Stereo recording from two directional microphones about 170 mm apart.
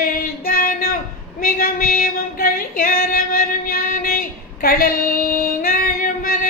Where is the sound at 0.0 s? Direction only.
55° left (ahead or behind).